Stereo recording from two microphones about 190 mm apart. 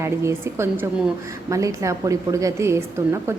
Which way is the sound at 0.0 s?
15° right (ahead or behind).